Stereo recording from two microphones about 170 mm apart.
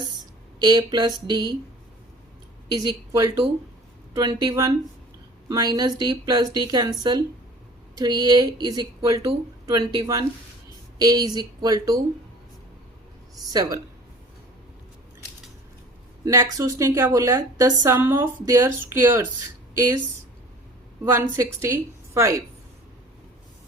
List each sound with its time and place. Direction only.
0.6 s speech: 25° right (ahead or behind)
2.7 s speech: 20° right (ahead or behind)
7.9 s speech: 25° right (ahead or behind)
13.3 s speech: 20° right (ahead or behind)
16.2 s speech: 20° right (ahead or behind)
21.0 s speech: 15° right (ahead or behind)